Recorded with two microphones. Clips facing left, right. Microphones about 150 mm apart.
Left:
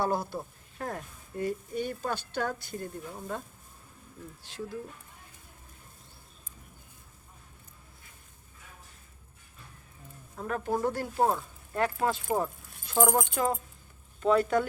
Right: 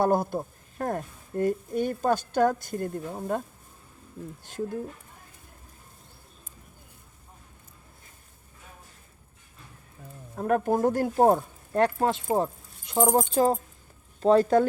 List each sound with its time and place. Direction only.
0.0 s speech: 50° right (ahead or behind)
4.4 s speech: 50° right (ahead or behind)
10.3 s speech: 50° right (ahead or behind); by 12.0 s 35° right (ahead or behind)
12.0 s speech: 25° right (ahead or behind)